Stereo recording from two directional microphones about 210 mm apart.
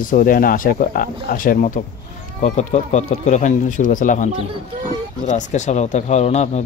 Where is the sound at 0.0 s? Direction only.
40° left (ahead or behind).